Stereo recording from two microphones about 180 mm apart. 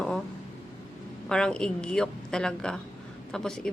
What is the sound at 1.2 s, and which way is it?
A woman's voice, 5° left (ahead or behind).